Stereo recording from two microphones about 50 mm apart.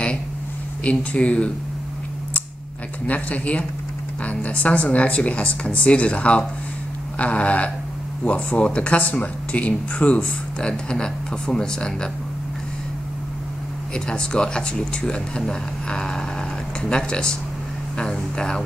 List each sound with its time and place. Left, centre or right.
0.8 s speech: left
3.1 s speech: left
13.9 s speech: centre